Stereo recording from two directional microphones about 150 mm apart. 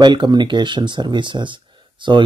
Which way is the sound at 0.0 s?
30° right (ahead or behind).